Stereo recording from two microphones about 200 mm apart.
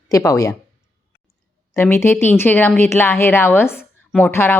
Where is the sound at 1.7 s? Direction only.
10° left (ahead or behind).